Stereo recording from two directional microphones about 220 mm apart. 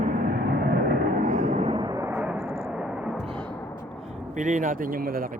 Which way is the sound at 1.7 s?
20° right (ahead or behind).